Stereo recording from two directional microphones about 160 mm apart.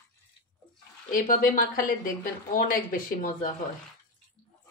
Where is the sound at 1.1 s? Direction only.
60° left (ahead or behind).